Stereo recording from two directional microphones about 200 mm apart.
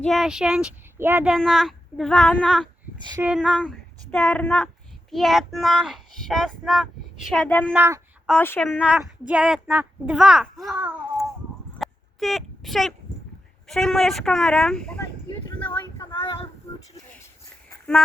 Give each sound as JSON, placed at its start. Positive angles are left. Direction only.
{"t": 0.0, "sound": "speech", "side_deg": 0}
{"t": 3.0, "sound": "speech", "side_deg": -20}
{"t": 3.2, "sound": "speech", "side_deg": -5}
{"t": 7.7, "sound": "speech", "side_deg": -10}
{"t": 8.3, "sound": "a woman's voice", "side_deg": 10}
{"t": 8.7, "sound": "speech", "side_deg": -5}
{"t": 11.8, "sound": "a sound", "side_deg": 0}
{"t": 13.7, "sound": "speech", "side_deg": 0}
{"t": 15.6, "sound": "a sound", "side_deg": 20}
{"t": 16.2, "sound": "child singing", "side_deg": 25}
{"t": 17.7, "sound": "a sound", "side_deg": 5}